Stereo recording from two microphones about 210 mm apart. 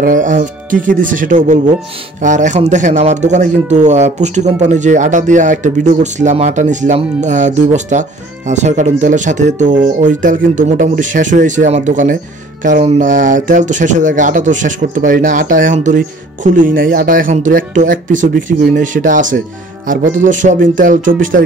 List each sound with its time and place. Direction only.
0.0 s speech: 40° right (ahead or behind)